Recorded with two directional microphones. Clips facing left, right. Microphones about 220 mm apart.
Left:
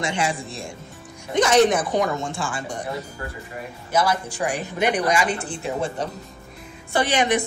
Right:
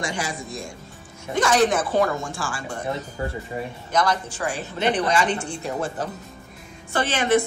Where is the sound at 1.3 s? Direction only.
20° left (ahead or behind).